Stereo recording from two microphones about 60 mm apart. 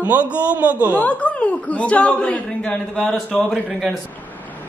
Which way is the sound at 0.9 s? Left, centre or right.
Left.